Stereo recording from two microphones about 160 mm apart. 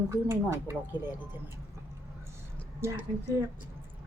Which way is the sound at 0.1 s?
15° right (ahead or behind).